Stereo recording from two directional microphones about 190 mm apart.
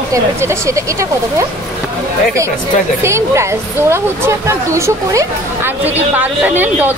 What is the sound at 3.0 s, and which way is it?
Speech, 15° right (ahead or behind).